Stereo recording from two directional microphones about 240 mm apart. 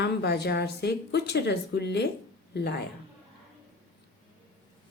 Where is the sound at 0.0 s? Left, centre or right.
Left.